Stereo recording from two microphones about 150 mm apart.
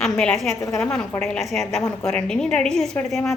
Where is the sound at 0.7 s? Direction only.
5° left (ahead or behind).